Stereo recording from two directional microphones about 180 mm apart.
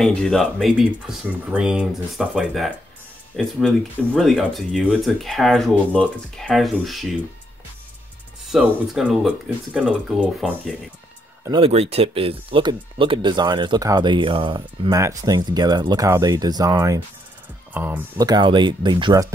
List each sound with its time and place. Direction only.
0.0 s speech: 5° left (ahead or behind)
8.5 s speech: centre (ahead or behind)
11.5 s speech: 35° right (ahead or behind); by 18.0 s 10° right (ahead or behind)
18.1 s speech: 25° right (ahead or behind)